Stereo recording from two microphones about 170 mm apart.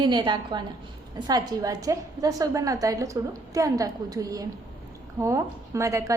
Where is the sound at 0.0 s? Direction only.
25° right (ahead or behind).